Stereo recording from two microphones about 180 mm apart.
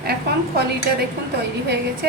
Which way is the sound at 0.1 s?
60° right (ahead or behind).